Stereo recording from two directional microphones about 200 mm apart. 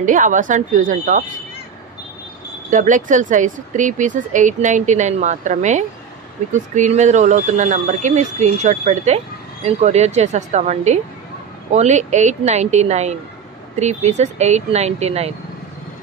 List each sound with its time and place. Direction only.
0.0 s speech: 40° right (ahead or behind)
2.7 s speech: 40° right (ahead or behind)